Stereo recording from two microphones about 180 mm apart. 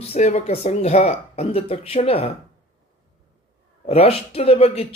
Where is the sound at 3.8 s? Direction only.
35° left (ahead or behind).